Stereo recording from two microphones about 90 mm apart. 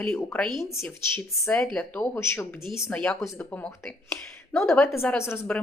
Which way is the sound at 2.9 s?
10° left (ahead or behind).